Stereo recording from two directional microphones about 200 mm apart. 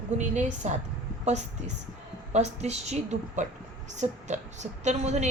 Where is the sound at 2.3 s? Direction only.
35° right (ahead or behind).